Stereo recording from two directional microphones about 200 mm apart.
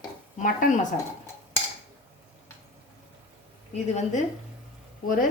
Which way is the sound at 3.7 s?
35° left (ahead or behind).